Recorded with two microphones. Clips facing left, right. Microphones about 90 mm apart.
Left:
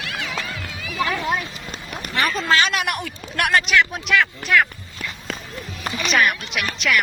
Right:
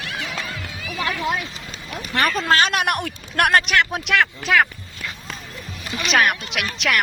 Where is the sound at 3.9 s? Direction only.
85° right.